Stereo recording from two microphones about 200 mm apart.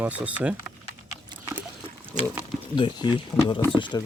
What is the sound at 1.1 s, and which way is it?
Dog, 15° right (ahead or behind).